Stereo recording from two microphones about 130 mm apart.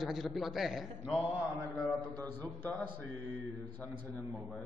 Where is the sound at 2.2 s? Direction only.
10° left (ahead or behind).